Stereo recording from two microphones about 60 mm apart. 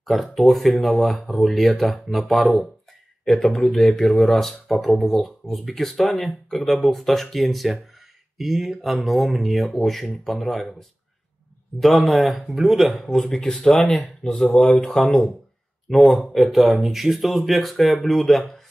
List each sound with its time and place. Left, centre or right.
0.0 s speech: centre
11.8 s speech: centre
15.9 s speech: centre